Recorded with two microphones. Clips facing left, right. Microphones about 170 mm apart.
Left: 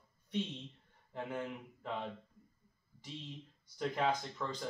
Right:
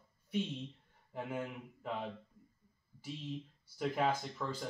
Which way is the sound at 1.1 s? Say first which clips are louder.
Even; 5° right (ahead or behind).